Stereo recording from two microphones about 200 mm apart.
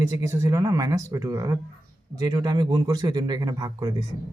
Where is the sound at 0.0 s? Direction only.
15° right (ahead or behind).